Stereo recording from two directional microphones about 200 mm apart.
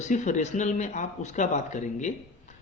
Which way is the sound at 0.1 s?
40° left (ahead or behind).